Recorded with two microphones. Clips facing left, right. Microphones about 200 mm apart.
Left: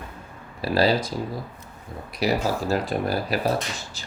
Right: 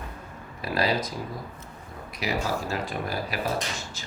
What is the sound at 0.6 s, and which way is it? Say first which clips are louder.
Speech: left 5 dB; 30° left (ahead or behind).